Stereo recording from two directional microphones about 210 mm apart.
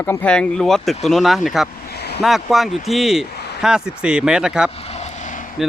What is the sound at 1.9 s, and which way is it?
Vehicle, 50° left (ahead or behind).